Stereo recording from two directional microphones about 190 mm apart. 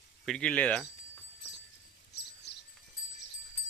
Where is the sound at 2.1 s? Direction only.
60° left (ahead or behind).